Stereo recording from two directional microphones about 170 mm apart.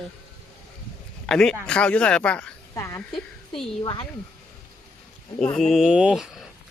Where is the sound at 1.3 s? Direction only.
5° left (ahead or behind).